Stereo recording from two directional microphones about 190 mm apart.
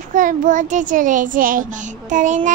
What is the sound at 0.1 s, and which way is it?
Child singing, 45° right (ahead or behind).